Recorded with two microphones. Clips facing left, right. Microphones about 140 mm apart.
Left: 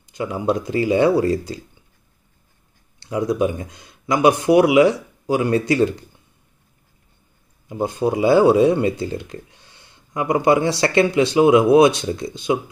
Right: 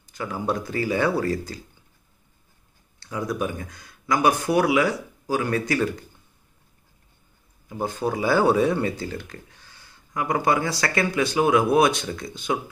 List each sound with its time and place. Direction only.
0.1 s speech: 20° left (ahead or behind)
3.0 s speech: 20° left (ahead or behind)
7.6 s speech: 20° left (ahead or behind)